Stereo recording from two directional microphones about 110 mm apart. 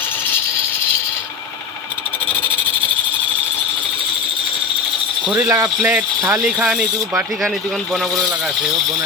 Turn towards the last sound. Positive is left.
turn(degrees=-10)  # may be behind; listen again after turning